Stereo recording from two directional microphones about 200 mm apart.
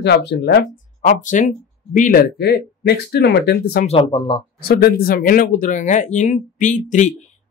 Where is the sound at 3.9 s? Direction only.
25° left (ahead or behind).